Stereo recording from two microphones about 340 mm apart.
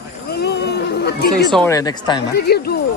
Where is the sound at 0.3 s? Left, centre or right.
Left.